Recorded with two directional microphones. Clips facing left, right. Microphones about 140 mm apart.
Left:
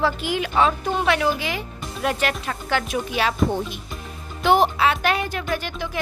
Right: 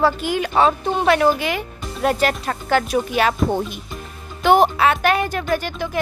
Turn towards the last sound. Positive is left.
turn(degrees=-45)  # may be behind; listen again after turning